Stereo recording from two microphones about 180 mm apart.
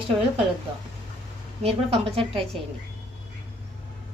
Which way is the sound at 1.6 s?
35° right (ahead or behind).